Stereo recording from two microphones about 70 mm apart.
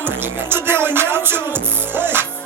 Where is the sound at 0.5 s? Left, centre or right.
Right.